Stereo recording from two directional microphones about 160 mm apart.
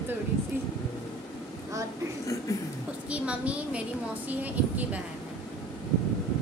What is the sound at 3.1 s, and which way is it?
A woman's voice, 10° right (ahead or behind).